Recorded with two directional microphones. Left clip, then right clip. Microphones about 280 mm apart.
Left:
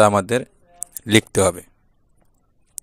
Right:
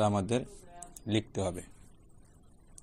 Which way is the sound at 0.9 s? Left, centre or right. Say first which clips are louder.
Left 16 dB; left.